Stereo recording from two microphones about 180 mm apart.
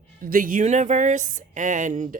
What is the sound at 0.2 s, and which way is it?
A woman's voice, 50° right (ahead or behind).